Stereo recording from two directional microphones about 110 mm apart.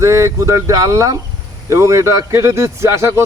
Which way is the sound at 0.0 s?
25° right (ahead or behind).